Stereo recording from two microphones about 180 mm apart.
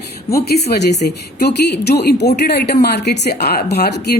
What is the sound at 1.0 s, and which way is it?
A woman's voice, 65° left (ahead or behind).